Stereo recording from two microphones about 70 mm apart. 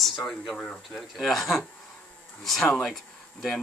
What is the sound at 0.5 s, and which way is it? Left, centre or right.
Speech, centre.